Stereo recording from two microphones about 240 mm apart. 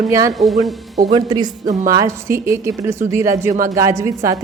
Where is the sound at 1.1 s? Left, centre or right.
Centre.